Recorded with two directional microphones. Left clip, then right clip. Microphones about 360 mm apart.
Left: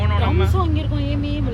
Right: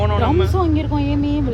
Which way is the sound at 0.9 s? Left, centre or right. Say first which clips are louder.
Right 6 dB; right.